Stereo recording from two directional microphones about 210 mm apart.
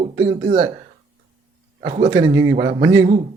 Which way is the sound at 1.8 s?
30° right (ahead or behind).